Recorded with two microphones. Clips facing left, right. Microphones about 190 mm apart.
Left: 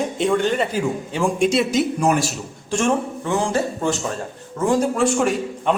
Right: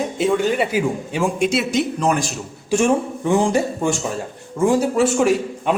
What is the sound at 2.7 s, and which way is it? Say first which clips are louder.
Speech: right 3 dB; 10° right (ahead or behind).